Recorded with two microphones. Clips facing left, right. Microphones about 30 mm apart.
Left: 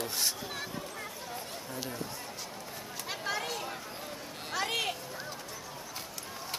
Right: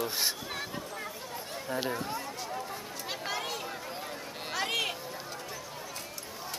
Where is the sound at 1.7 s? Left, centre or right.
Right.